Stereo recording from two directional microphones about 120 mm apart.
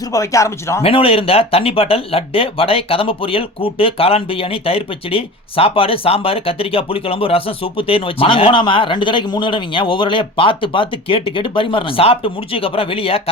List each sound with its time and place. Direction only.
0.1 s speech: 25° left (ahead or behind)
0.8 s speech: 50° left (ahead or behind)